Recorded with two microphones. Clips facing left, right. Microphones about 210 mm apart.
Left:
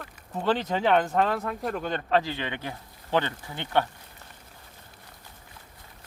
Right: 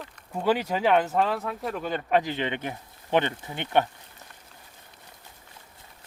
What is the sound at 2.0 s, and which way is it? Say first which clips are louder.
Speech: right 2 dB; 15° right (ahead or behind).